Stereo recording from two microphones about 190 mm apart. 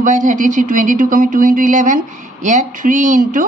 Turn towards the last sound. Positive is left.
turn(degrees=-45)  # may be behind; listen again after turning